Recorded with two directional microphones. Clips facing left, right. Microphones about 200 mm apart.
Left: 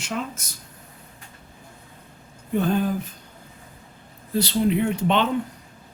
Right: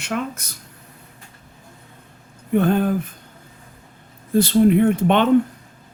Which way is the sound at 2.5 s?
60° right (ahead or behind).